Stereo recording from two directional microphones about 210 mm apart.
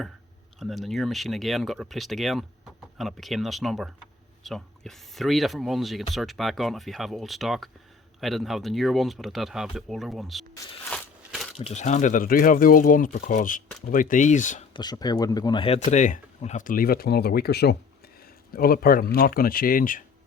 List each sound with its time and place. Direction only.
0.6 s speech: centre (ahead or behind)
10.5 s a sound: 10° left (ahead or behind)
11.3 s crumpling: centre (ahead or behind)
11.5 s speech: 30° left (ahead or behind)
14.7 s speech: 20° left (ahead or behind); by 17.7 s 50° left (ahead or behind)
18.2 s a sound: 45° left (ahead or behind)
19.1 s speech: 45° left (ahead or behind)